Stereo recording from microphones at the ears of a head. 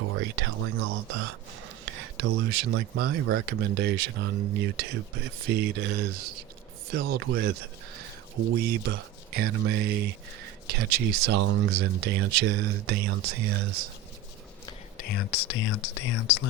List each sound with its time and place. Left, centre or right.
0.0 s speech: right
14.9 s speech: left